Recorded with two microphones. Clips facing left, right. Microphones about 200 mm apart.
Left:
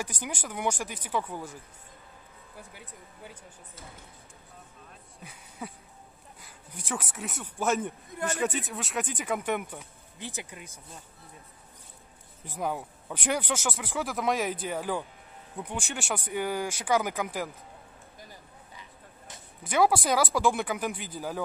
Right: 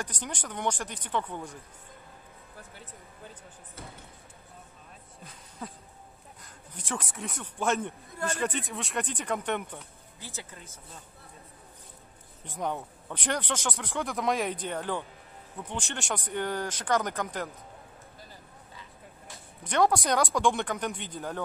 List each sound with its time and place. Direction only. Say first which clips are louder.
0.0 s speech: left 1 dB; 10° left (ahead or behind)
5.2 s a sound: left 1 dB; 10° left (ahead or behind)
6.9 s speech: even; 5° left (ahead or behind)
12.4 s speech: left 1 dB; 5° left (ahead or behind)
18.8 s vehicle: right 1 dB; 20° left (ahead or behind)
19.6 s speech: left 1 dB; 5° left (ahead or behind)